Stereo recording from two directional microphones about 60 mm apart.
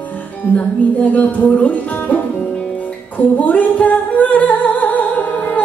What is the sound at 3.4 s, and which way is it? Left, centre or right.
Music, left.